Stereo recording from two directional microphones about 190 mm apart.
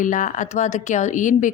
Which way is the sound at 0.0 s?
40° left (ahead or behind).